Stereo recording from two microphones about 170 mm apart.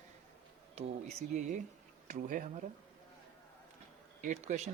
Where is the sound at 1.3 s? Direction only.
45° right (ahead or behind).